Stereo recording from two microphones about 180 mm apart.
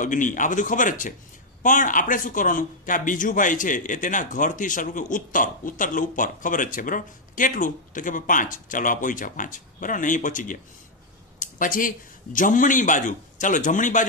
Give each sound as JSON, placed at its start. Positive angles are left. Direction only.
{"t": 0.0, "sound": "a man's voice", "side_deg": 45}